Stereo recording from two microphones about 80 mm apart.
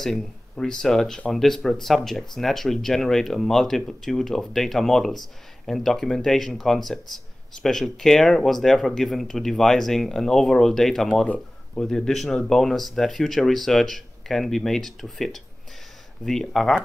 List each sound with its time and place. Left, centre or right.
0.0 s speech: centre